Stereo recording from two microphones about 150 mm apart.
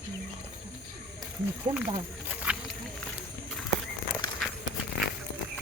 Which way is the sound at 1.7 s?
35° right (ahead or behind).